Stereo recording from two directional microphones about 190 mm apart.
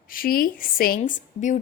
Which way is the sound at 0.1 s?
50° left (ahead or behind).